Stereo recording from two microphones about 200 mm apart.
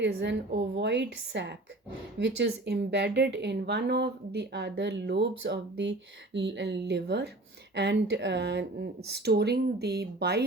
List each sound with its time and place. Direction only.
0.0 s speech: 60° right (ahead or behind)